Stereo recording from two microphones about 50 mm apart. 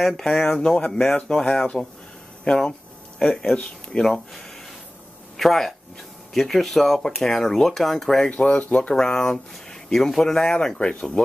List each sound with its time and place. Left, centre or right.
0.0 s speech: centre
4.1 s speech: centre
8.3 s speech: left
8.9 s speech: centre